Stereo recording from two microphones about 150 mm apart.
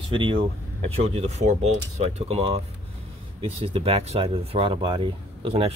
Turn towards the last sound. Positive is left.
turn(degrees=-40)  # may be behind; listen again after turning